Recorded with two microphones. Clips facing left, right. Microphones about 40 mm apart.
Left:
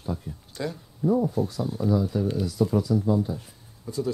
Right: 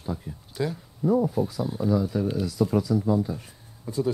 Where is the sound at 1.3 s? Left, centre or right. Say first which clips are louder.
Right 1 dB; centre.